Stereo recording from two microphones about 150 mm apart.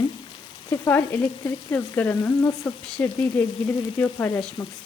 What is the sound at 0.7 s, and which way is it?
Frying, 15° left (ahead or behind).